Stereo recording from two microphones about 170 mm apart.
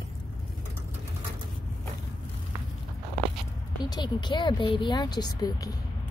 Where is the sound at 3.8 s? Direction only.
25° left (ahead or behind).